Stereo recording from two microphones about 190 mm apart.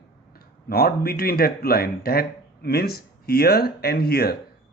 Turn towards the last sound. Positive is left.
turn(degrees=55)  # may be behind; listen again after turning